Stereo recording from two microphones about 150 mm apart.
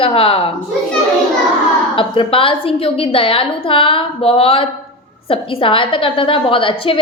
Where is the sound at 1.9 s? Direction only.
35° left (ahead or behind).